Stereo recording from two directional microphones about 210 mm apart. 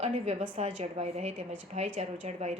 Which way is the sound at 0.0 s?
30° right (ahead or behind).